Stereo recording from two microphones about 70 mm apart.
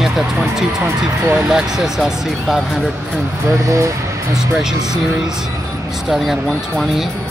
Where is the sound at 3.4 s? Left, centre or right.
Right.